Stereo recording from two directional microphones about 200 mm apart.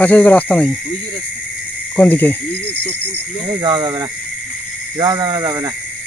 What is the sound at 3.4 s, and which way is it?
Speech, 20° right (ahead or behind).